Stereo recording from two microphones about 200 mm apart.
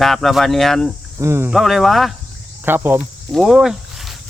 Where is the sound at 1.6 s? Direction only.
Centre (ahead or behind).